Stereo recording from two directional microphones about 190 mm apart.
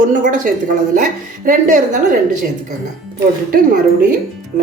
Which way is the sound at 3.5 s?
50° right (ahead or behind).